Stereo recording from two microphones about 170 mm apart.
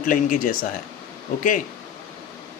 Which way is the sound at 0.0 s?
55° left (ahead or behind).